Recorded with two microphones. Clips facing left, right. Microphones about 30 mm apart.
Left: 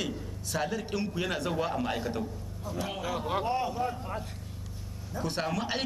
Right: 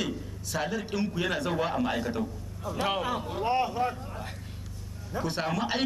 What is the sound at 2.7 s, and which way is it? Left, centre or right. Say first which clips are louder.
Speech: right 5 dB; right.